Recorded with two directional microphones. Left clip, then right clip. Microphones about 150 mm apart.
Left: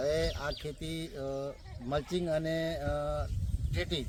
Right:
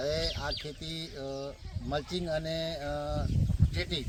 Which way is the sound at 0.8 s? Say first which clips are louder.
Even; 50° left (ahead or behind).